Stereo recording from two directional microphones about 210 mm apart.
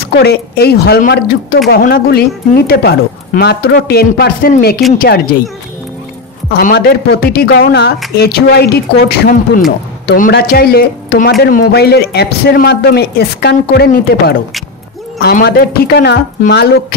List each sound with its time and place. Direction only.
0.0 s speech: 50° left (ahead or behind)
6.5 s speech: 45° left (ahead or behind)